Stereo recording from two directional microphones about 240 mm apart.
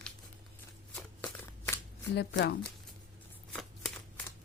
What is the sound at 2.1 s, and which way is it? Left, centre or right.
Speech, left.